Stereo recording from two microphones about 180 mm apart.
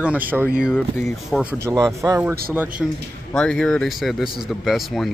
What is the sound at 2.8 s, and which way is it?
Speech, centre (ahead or behind).